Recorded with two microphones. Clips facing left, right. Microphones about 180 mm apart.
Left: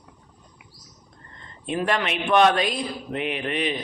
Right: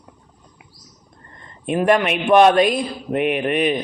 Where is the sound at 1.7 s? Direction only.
55° right (ahead or behind).